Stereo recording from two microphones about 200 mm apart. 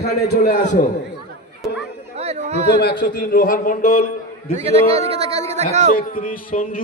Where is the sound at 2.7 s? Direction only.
50° left (ahead or behind).